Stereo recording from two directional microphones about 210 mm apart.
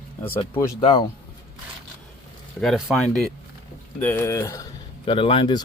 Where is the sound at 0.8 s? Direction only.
25° left (ahead or behind).